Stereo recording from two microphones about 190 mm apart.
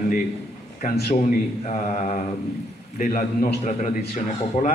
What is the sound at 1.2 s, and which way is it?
A man's voice, 40° left (ahead or behind).